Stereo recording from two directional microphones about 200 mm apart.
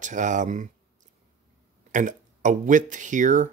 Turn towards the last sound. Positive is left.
turn(degrees=-40)  # may be behind; listen again after turning